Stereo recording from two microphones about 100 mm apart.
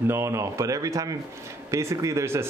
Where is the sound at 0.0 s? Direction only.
25° right (ahead or behind).